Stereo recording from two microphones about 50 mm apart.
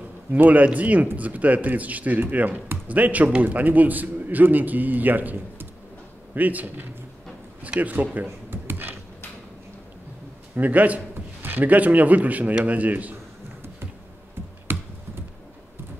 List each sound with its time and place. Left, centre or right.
0.3 s a man's voice: right
10.5 s a man's voice: right
11.1 s a man's voice: right
14.7 s computer keyboard: right